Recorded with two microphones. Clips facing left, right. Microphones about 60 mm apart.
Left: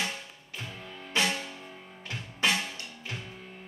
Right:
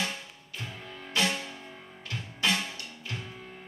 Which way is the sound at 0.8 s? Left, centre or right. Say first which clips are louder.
Even; centre.